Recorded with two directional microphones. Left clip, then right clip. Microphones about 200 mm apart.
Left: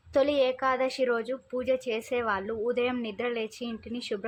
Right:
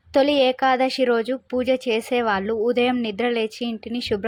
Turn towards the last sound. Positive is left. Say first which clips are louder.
# right 9 dB
turn(degrees=-25)  # may be behind; listen again after turning